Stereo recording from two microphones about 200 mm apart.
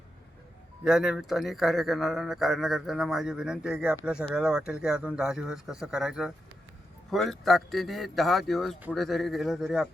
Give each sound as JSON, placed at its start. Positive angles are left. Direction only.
{"t": 0.9, "sound": "a man's voice", "side_deg": -5}